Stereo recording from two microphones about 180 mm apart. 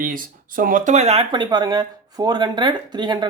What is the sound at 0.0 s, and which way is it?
Speech, 50° right (ahead or behind).